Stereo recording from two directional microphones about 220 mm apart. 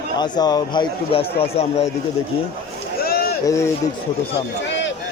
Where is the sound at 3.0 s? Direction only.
45° left (ahead or behind).